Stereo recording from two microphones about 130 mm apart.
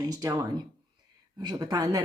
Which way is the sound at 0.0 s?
30° right (ahead or behind).